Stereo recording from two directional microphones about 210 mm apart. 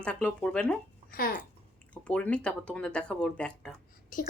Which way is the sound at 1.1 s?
45° left (ahead or behind).